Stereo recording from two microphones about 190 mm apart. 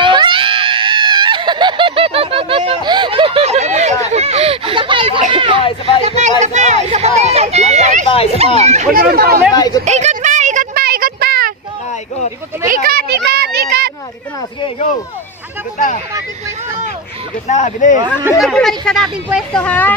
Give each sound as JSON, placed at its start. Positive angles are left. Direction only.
{"t": 0.0, "sound": "screaming", "side_deg": -25}
{"t": 5.3, "sound": "speech", "side_deg": -25}
{"t": 5.6, "sound": "speech", "side_deg": 30}
{"t": 6.0, "sound": "speech", "side_deg": -35}
{"t": 8.9, "sound": "speech", "side_deg": -50}
{"t": 9.6, "sound": "speech", "side_deg": 20}
{"t": 9.8, "sound": "a sound", "side_deg": -35}
{"t": 12.6, "sound": "a child's voice", "side_deg": -50}
{"t": 17.5, "sound": "speech", "side_deg": 40}
{"t": 18.4, "sound": "speech", "side_deg": 0}